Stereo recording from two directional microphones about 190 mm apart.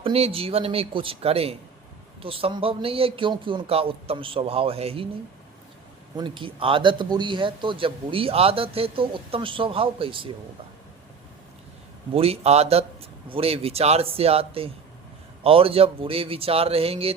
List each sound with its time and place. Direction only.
0.0 s a man's voice: 30° right (ahead or behind)
6.1 s a man's voice: 25° right (ahead or behind)
12.1 s a man's voice: 30° right (ahead or behind)